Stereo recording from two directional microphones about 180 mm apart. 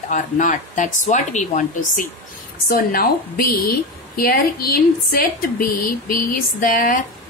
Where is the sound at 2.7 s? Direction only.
55° left (ahead or behind).